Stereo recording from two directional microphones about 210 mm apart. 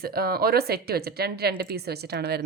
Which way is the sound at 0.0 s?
45° right (ahead or behind).